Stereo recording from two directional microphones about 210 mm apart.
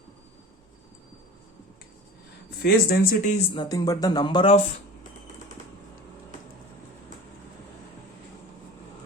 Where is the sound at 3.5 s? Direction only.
15° left (ahead or behind).